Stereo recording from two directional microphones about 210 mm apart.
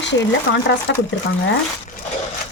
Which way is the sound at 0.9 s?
55° left (ahead or behind).